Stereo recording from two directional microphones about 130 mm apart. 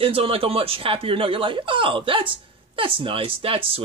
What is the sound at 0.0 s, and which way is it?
Speech, 45° right (ahead or behind).